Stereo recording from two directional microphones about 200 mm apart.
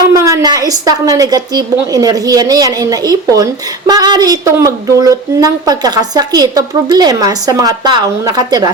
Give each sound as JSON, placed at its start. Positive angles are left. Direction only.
{"t": 0.1, "sound": "a woman's voice", "side_deg": -15}